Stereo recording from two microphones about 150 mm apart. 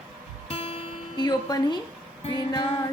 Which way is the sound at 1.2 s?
25° left (ahead or behind).